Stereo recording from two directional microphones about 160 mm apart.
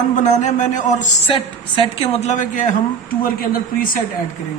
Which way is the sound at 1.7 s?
35° left (ahead or behind).